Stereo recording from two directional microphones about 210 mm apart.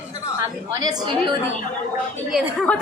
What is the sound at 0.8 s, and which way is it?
Speech, 20° right (ahead or behind).